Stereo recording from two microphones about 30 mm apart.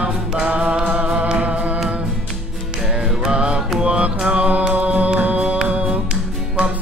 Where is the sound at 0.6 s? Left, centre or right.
Right.